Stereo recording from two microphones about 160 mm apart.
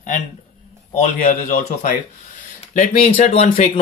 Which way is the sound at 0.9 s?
45° left (ahead or behind).